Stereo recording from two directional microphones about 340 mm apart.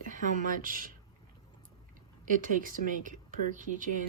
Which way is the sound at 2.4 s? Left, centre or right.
Right.